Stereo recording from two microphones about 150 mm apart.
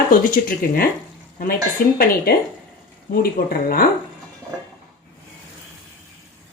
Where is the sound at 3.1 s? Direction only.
75° left (ahead or behind).